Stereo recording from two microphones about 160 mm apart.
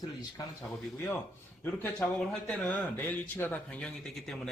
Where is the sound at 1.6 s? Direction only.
10° left (ahead or behind).